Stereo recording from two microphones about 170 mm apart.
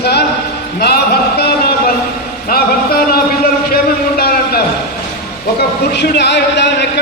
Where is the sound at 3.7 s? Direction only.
60° left (ahead or behind).